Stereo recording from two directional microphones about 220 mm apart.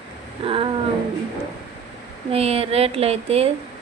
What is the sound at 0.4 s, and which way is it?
Speech, 25° right (ahead or behind).